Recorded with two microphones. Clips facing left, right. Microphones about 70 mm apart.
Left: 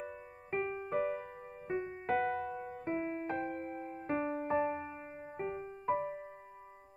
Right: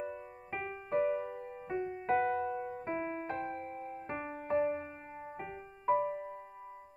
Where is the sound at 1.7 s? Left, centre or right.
Left.